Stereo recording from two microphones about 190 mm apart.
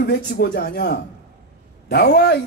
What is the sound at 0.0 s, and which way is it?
A man's voice, 60° left (ahead or behind).